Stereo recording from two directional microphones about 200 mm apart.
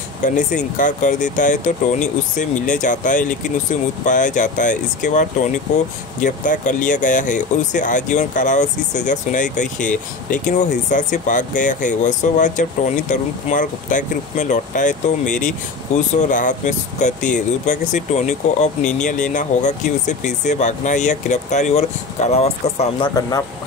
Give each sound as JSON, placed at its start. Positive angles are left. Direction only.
{"t": 0.2, "sound": "speech", "side_deg": 40}
{"t": 6.2, "sound": "speech", "side_deg": 40}